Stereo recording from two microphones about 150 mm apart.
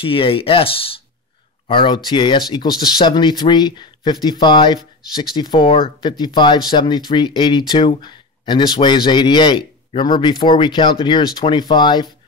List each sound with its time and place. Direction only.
0.0 s speech: 35° left (ahead or behind)